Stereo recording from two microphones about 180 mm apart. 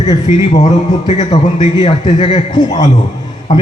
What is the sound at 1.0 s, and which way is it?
A man's voice, 40° left (ahead or behind).